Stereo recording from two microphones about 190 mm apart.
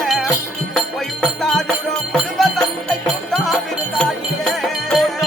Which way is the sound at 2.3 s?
Centre (ahead or behind).